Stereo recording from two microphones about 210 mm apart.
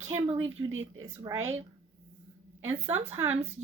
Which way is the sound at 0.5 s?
70° right (ahead or behind).